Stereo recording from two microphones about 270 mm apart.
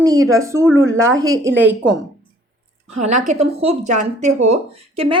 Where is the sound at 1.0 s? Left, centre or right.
Right.